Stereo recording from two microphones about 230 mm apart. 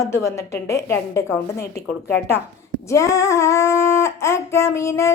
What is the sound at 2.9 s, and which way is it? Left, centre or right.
Speech, centre.